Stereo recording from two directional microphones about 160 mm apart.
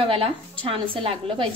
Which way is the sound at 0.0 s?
35° right (ahead or behind).